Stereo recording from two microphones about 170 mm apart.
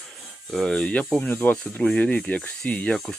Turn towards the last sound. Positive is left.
turn(degrees=5)  # may be behind; listen again after turning